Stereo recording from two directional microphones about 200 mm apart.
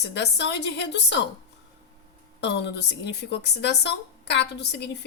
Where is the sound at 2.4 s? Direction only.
60° left (ahead or behind).